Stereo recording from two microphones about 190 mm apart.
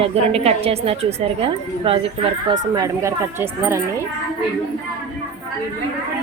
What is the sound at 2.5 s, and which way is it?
Speech, 20° right (ahead or behind).